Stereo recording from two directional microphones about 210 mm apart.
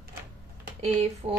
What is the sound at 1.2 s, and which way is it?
Speech, 30° right (ahead or behind).